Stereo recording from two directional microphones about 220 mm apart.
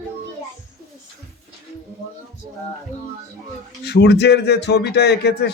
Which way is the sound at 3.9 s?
50° left (ahead or behind).